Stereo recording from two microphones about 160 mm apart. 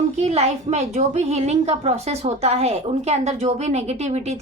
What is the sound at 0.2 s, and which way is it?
A woman's voice, 40° right (ahead or behind).